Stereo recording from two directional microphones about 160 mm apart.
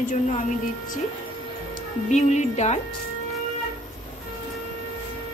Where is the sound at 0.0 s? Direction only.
50° left (ahead or behind).